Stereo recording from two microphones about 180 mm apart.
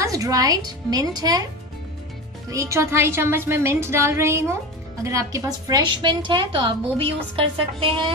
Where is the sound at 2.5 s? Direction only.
15° right (ahead or behind).